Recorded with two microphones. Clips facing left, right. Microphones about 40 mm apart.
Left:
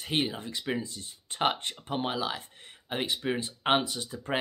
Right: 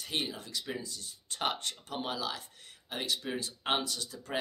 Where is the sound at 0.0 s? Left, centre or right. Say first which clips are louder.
Left 6 dB; left.